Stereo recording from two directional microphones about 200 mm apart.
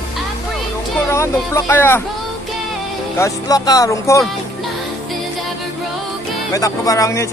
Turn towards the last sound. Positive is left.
turn(degrees=15)  # may be behind; listen again after turning